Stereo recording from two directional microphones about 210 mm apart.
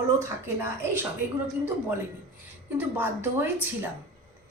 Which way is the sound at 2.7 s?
10° right (ahead or behind).